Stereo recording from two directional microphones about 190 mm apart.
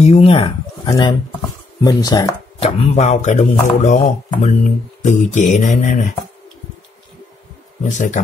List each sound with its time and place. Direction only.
0.0 s speech: 30° left (ahead or behind)
2.6 s speech: 35° left (ahead or behind)
7.8 s speech: 40° left (ahead or behind)